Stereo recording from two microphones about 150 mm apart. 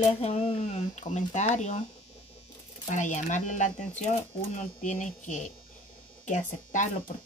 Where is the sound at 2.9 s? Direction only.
55° left (ahead or behind).